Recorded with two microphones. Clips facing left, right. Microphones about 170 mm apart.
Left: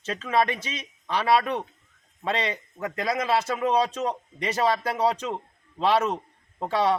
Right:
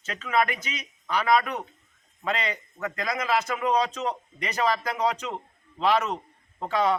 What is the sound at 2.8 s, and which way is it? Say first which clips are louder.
A man's voice: left 3 dB; 30° left (ahead or behind).